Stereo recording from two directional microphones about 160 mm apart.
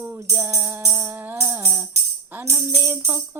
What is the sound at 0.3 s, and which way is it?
Music, 15° right (ahead or behind).